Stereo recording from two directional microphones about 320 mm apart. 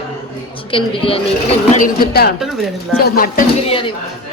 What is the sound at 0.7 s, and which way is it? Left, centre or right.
A man's voice, centre.